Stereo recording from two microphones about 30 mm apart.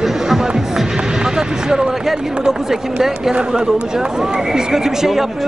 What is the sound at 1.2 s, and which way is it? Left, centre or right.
Speech, right.